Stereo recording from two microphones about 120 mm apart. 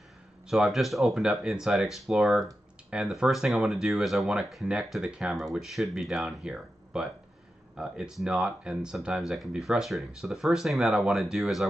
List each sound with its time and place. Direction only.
0.5 s speech: centre (ahead or behind)